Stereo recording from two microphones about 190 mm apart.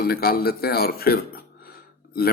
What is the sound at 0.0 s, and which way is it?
Speech, 55° left (ahead or behind).